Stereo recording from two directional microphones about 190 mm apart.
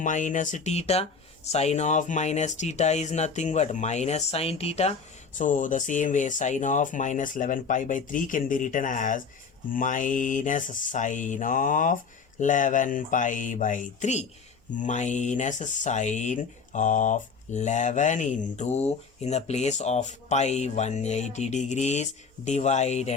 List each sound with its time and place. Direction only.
0.0 s speech: 40° left (ahead or behind)